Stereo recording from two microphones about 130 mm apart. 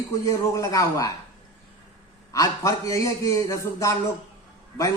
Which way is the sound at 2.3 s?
25° left (ahead or behind).